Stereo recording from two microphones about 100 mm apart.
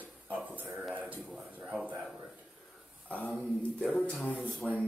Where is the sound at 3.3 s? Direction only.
10° left (ahead or behind).